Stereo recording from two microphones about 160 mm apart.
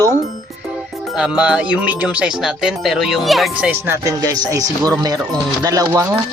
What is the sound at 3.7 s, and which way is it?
Speech, 15° right (ahead or behind).